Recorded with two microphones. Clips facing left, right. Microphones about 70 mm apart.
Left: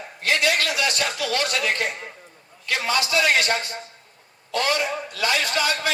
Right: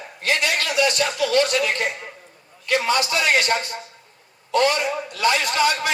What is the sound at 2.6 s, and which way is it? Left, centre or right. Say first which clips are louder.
A man's voice: right 3 dB; right.